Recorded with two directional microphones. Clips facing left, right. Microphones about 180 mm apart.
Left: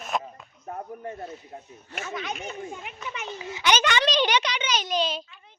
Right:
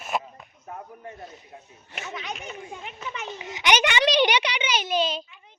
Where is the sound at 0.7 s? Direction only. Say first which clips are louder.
Left 4 dB; 40° left (ahead or behind).